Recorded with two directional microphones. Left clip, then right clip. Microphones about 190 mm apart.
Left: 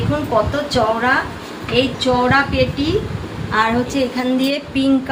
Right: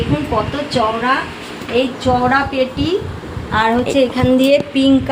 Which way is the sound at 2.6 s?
40° right (ahead or behind).